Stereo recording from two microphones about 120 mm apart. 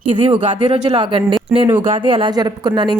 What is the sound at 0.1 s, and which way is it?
Speech, 45° right (ahead or behind).